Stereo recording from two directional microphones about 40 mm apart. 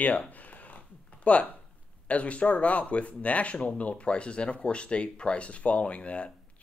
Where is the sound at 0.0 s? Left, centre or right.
Left.